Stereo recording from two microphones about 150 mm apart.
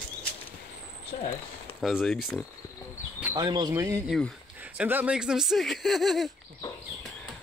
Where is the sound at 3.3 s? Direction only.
25° right (ahead or behind).